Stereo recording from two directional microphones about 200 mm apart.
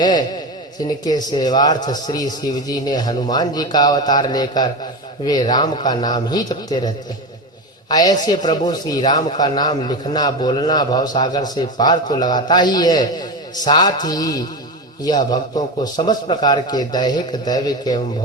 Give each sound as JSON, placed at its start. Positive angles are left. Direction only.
{"t": 0.0, "sound": "a man's voice", "side_deg": 20}